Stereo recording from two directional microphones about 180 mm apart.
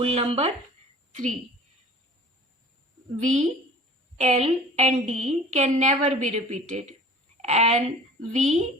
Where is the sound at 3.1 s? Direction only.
40° right (ahead or behind).